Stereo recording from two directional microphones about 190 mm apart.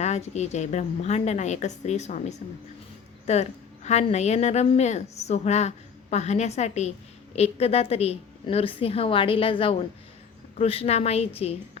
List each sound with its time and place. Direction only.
0.0 s a woman's voice: 35° left (ahead or behind)
3.2 s a woman's voice: 35° left (ahead or behind)